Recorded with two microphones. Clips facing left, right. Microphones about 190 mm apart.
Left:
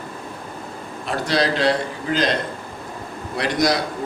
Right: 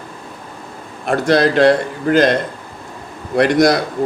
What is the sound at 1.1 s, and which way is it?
A man's voice, 55° right (ahead or behind).